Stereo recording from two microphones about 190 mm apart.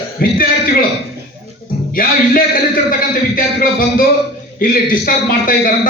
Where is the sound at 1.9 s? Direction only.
50° left (ahead or behind).